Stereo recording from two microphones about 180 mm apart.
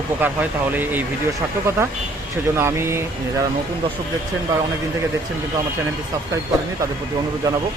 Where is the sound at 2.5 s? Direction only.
15° right (ahead or behind).